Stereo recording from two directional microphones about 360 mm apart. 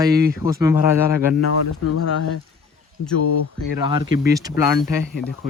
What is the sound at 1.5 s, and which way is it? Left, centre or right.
Speech, left.